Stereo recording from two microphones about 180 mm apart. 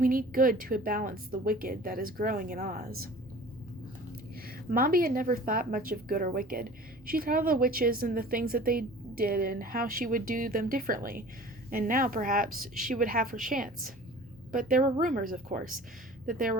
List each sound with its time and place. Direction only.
0.0 s a woman's voice: 50° right (ahead or behind)
4.7 s a woman's voice: 55° right (ahead or behind)